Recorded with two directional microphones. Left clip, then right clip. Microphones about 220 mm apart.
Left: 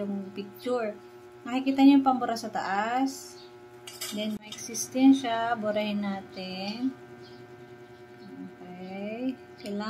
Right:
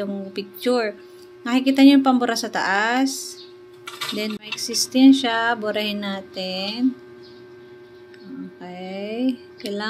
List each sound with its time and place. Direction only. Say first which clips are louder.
0.3 s speech: right 10 dB; 30° right (ahead or behind)
4.2 s speech: right 8 dB; 25° right (ahead or behind)
8.7 s speech: right 8 dB; 30° right (ahead or behind)